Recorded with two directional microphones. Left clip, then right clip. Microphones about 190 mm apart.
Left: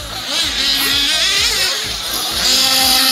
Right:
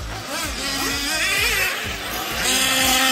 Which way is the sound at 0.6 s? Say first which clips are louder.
Left 8 dB; 30° right (ahead or behind).